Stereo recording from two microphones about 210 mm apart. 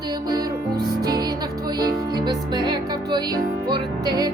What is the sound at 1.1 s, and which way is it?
Music, 20° right (ahead or behind).